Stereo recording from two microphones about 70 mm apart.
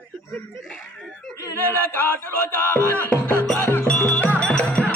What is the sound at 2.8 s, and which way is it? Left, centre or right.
Speech, left.